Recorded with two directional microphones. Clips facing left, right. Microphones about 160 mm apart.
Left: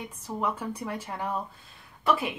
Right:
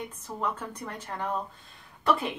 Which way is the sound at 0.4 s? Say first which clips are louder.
Left 2 dB; 10° left (ahead or behind).